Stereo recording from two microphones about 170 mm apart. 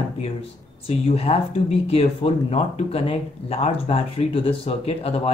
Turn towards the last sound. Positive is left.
turn(degrees=35)  # may be behind; listen again after turning